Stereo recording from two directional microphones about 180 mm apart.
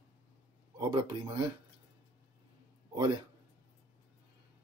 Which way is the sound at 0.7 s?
25° right (ahead or behind).